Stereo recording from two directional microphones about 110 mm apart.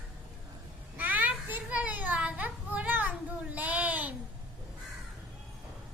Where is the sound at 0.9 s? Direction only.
15° right (ahead or behind).